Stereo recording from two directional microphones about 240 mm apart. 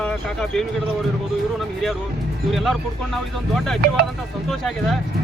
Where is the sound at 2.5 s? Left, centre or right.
Centre.